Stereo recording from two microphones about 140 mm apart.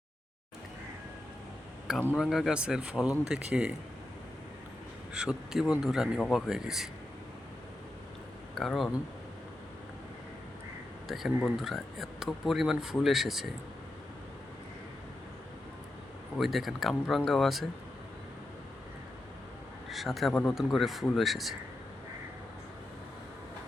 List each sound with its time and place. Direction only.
2.1 s speech: centre (ahead or behind)
5.1 s speech: 5° right (ahead or behind)
8.5 s speech: centre (ahead or behind)
11.1 s speech: centre (ahead or behind)
16.4 s speech: centre (ahead or behind)
19.9 s speech: centre (ahead or behind)